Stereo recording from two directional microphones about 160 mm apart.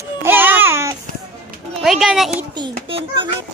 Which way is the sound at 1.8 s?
Centre (ahead or behind).